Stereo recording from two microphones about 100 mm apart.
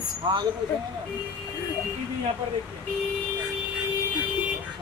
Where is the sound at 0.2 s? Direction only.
50° right (ahead or behind).